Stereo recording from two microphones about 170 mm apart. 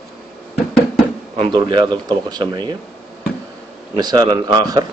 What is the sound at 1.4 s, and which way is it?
Speech, 30° right (ahead or behind).